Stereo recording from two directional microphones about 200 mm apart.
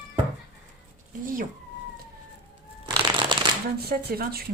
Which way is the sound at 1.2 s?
45° right (ahead or behind).